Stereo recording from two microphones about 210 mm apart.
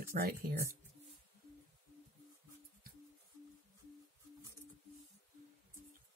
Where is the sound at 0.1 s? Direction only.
45° right (ahead or behind).